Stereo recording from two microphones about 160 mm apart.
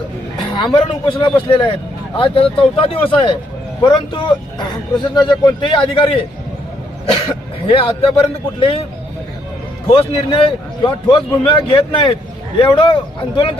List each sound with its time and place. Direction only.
0.5 s a man's voice: 30° left (ahead or behind)
9.9 s a man's voice: 35° left (ahead or behind)